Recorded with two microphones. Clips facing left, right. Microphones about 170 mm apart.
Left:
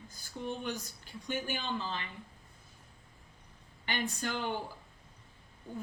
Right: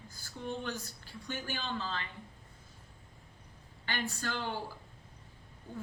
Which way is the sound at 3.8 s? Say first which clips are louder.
Left 2 dB; 20° left (ahead or behind).